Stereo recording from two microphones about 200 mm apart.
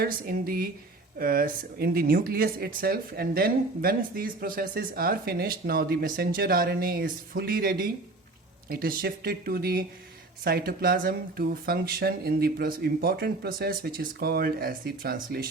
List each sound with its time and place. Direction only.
0.0 s speech: 45° right (ahead or behind)